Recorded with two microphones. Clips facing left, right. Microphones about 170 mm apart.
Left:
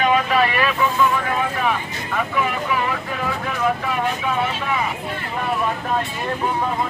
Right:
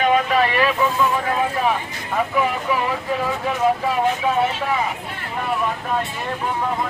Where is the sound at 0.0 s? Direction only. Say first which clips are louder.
Even; 40° right (ahead or behind).